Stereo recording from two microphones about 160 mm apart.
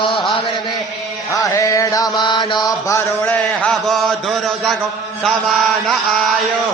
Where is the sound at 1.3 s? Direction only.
20° left (ahead or behind); by 4.8 s centre (ahead or behind).